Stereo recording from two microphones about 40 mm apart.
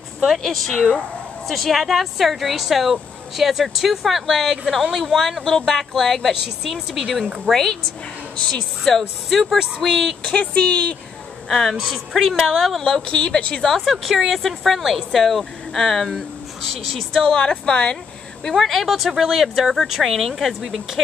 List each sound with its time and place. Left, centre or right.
0.4 s speech: centre
8.8 s speech: centre
10.4 s a woman's voice: left
11.4 s speech: centre
12.8 s speech: centre
14.0 s speech: centre
17.2 s a woman's voice: centre
18.5 s speech: centre